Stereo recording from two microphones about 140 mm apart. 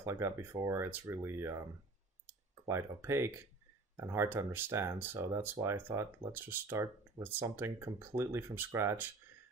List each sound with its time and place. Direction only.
0.0 s speech: 20° right (ahead or behind)
2.6 s speech: 20° right (ahead or behind)